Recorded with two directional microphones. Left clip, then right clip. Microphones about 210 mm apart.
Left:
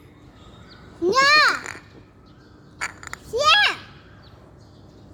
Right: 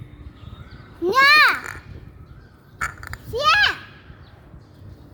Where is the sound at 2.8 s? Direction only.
Centre (ahead or behind).